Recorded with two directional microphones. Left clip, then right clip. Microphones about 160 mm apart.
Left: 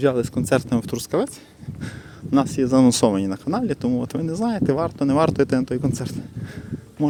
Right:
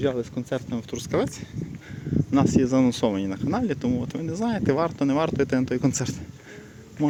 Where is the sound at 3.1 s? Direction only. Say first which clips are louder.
Left 4 dB; 30° left (ahead or behind).